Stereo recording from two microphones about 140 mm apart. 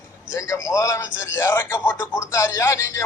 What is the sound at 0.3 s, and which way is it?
A man's voice, 20° left (ahead or behind).